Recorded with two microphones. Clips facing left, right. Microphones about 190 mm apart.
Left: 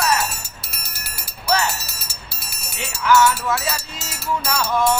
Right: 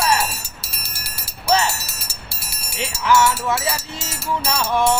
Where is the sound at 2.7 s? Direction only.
30° right (ahead or behind).